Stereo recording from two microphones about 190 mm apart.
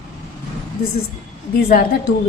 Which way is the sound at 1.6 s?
50° left (ahead or behind).